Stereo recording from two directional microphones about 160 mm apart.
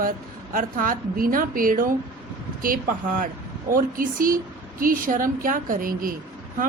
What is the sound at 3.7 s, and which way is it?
A woman's voice, 60° right (ahead or behind).